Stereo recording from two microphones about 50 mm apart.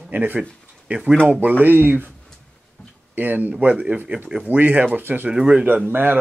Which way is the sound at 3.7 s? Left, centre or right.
Right.